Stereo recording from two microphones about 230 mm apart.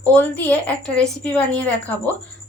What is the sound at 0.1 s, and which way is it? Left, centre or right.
A woman's voice, centre.